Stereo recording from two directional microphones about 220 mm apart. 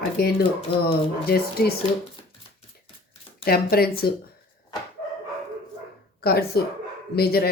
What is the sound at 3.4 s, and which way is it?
Speech, 45° left (ahead or behind).